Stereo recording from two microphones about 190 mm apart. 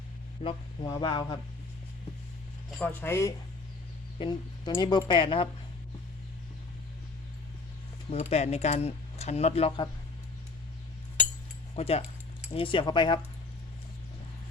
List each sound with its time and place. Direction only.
0.4 s speech: 25° left (ahead or behind)
2.6 s speech: 5° left (ahead or behind)
4.2 s speech: 25° left (ahead or behind)
8.1 s speech: 35° left (ahead or behind)
11.8 s speech: 30° left (ahead or behind)